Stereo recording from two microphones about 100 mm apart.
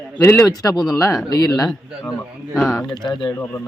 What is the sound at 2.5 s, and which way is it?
Speech, 5° left (ahead or behind).